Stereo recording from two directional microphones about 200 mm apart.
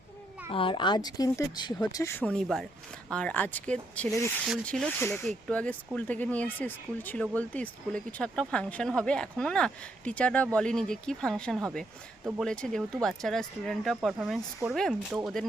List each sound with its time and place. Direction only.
0.5 s speech: 25° left (ahead or behind); by 15.2 s centre (ahead or behind)